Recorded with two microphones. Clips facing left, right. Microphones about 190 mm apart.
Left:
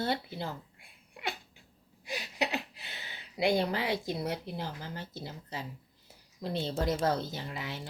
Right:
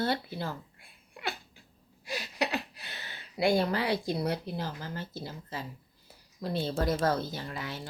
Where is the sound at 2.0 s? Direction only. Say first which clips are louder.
Right 1 dB; 20° left (ahead or behind).